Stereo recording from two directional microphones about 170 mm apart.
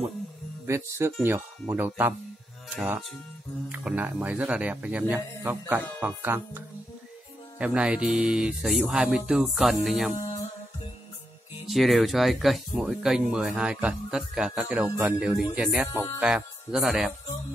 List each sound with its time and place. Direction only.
0.7 s speech: 15° right (ahead or behind)
3.6 s speech: 10° right (ahead or behind)
11.6 s speech: centre (ahead or behind)